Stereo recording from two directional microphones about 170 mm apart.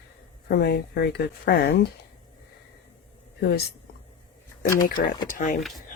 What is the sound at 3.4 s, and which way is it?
Speech, 70° left (ahead or behind).